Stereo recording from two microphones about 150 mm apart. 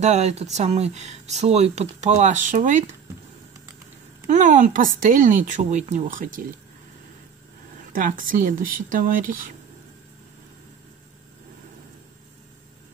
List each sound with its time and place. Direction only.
0.0 s speech: 45° right (ahead or behind)
4.3 s speech: 55° right (ahead or behind)
7.9 s speech: 65° right (ahead or behind)